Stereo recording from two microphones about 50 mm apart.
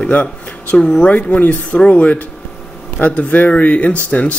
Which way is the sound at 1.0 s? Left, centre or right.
Left.